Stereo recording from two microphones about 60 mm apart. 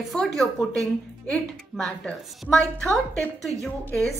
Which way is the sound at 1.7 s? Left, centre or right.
Centre.